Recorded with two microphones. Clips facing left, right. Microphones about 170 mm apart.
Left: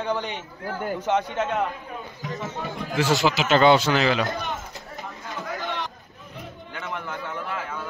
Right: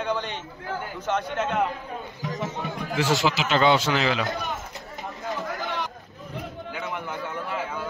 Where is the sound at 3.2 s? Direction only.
50° left (ahead or behind).